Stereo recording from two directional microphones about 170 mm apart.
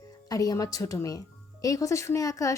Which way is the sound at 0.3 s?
20° left (ahead or behind).